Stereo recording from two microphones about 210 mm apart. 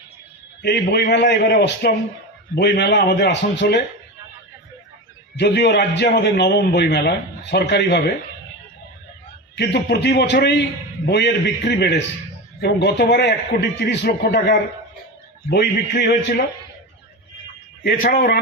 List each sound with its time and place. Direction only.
0.6 s a man's voice: 55° left (ahead or behind)
5.4 s a man's voice: 55° left (ahead or behind)
9.6 s a man's voice: 55° left (ahead or behind)
17.8 s a man's voice: 45° left (ahead or behind)